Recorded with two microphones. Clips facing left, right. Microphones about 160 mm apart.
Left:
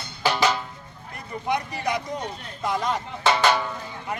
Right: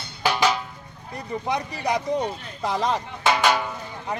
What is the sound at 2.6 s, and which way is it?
Speech, 30° right (ahead or behind).